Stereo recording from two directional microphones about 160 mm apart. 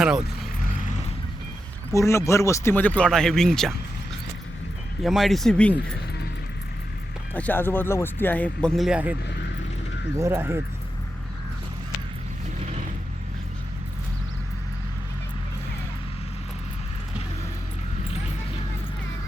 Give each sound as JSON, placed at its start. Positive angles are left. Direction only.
{"t": 0.0, "sound": "speech", "side_deg": -5}
{"t": 1.9, "sound": "speech", "side_deg": 20}
{"t": 5.0, "sound": "speech", "side_deg": 0}
{"t": 7.3, "sound": "speech", "side_deg": 10}
{"t": 10.2, "sound": "speech", "side_deg": -15}